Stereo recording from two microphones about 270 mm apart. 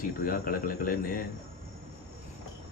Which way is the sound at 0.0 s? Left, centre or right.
Left.